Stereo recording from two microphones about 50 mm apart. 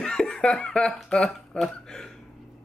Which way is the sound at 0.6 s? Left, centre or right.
Centre.